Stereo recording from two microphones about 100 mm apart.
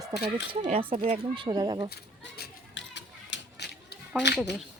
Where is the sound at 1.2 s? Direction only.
50° right (ahead or behind).